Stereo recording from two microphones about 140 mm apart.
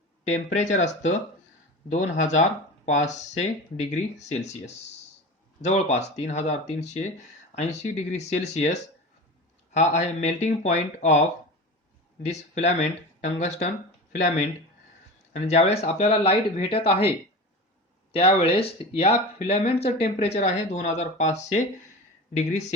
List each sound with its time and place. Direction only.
0.3 s speech: 55° left (ahead or behind)
12.2 s speech: 55° left (ahead or behind)
18.1 s speech: 45° left (ahead or behind)